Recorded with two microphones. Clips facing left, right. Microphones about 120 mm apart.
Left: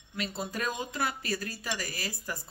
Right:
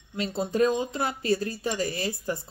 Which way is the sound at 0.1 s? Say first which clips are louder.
Right 7 dB; 25° right (ahead or behind).